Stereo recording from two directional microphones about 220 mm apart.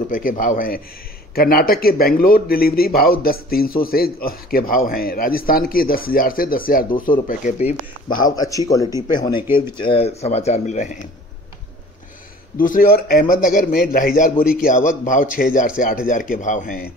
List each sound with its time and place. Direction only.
0.1 s a man's voice: 35° left (ahead or behind)
8.4 s speech: 15° left (ahead or behind); by 11.0 s 35° left (ahead or behind)
12.5 s a man's voice: 40° left (ahead or behind)